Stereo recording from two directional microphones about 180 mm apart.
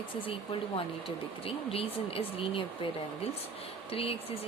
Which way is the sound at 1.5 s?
30° left (ahead or behind).